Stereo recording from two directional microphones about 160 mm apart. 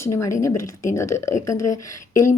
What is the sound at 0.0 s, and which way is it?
A woman's voice, 20° left (ahead or behind).